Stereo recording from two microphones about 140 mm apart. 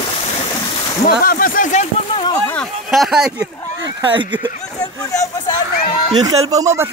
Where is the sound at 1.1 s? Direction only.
90° left; by 1.8 s 70° left (ahead or behind).